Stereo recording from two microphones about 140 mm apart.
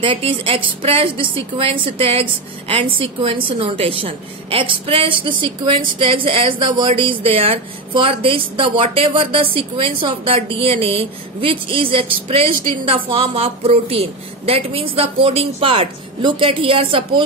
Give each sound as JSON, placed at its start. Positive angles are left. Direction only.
{"t": 0.0, "sound": "a woman's voice", "side_deg": -40}